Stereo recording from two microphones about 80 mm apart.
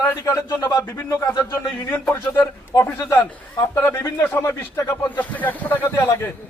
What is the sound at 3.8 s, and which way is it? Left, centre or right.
Speech, left.